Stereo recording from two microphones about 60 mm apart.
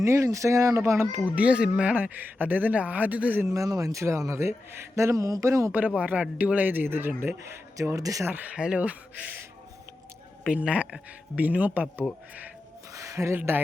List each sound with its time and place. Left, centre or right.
0.0 s a man's voice: right
0.8 s speech: right
1.4 s speech: centre
3.4 s a man's voice: right
6.0 s speech: right
7.8 s speech: right
8.3 s speech: right
10.5 s speech: right
12.9 s speech: right